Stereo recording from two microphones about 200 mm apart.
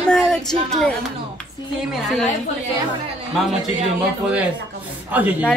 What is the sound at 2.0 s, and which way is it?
Speech, centre (ahead or behind).